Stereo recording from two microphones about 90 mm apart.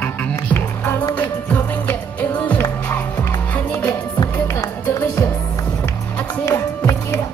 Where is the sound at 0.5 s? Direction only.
25° left (ahead or behind).